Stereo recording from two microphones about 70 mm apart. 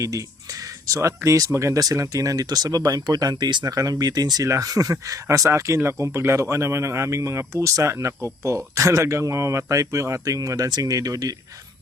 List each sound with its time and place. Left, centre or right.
0.0 s speech: right
1.8 s speech: right
4.4 s speech: right